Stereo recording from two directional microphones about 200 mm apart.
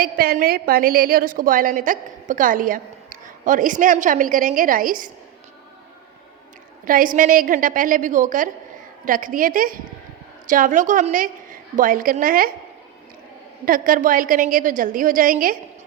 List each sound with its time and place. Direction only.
0.0 s a woman's voice: 50° right (ahead or behind)
6.8 s a woman's voice: 45° right (ahead or behind)
13.7 s a woman's voice: 45° right (ahead or behind)